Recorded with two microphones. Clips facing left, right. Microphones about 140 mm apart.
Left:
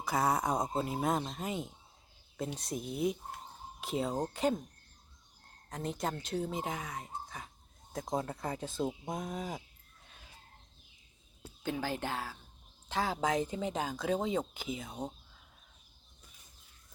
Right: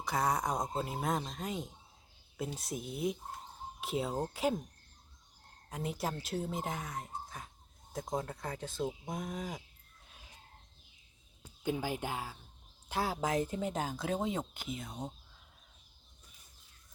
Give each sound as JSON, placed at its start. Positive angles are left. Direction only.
{"t": 0.0, "sound": "speech", "side_deg": 0}
{"t": 5.6, "sound": "speech", "side_deg": -5}
{"t": 8.8, "sound": "speech", "side_deg": 25}
{"t": 9.2, "sound": "speech", "side_deg": 5}
{"t": 11.6, "sound": "speech", "side_deg": -15}